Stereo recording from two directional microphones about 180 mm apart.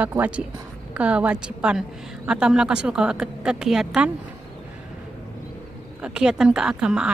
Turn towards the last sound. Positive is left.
turn(degrees=-5)  # may be behind; listen again after turning